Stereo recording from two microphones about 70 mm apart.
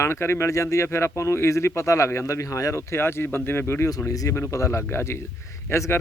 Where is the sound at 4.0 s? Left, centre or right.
Left.